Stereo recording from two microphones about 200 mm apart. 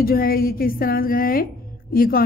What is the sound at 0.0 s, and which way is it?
A woman's voice, 45° left (ahead or behind).